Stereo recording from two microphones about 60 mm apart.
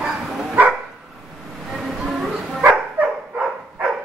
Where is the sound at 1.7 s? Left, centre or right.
Centre.